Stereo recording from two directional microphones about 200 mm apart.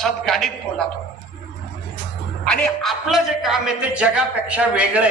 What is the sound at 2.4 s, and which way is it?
A man's voice, 5° left (ahead or behind).